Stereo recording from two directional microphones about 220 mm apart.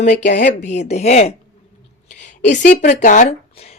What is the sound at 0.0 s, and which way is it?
A woman's voice, 35° left (ahead or behind).